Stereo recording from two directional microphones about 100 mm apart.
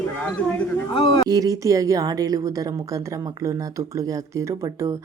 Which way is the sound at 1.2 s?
35° right (ahead or behind).